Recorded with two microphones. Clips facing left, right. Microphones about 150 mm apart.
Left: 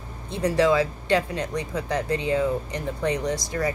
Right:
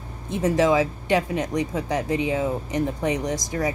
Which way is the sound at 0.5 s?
15° right (ahead or behind).